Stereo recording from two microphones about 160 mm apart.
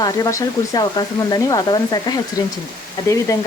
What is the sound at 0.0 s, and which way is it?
Speech, 20° left (ahead or behind).